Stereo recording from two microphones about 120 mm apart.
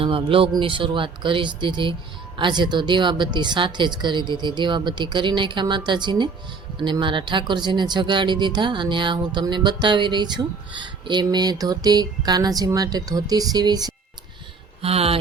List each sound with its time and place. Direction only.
0.0 s speech: 45° right (ahead or behind)
14.8 s speech: 55° right (ahead or behind)